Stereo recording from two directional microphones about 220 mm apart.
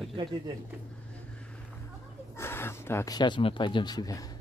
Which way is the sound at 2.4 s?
10° left (ahead or behind).